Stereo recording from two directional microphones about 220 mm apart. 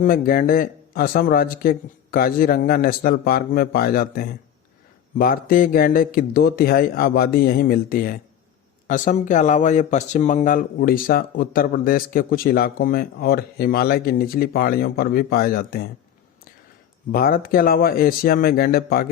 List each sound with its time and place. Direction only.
0.0 s speech: 40° left (ahead or behind)
17.1 s a man's voice: 40° left (ahead or behind)